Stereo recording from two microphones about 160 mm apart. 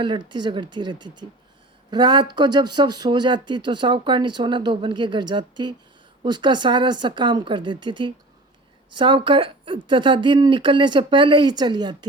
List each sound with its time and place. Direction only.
0.0 s speech: 30° right (ahead or behind)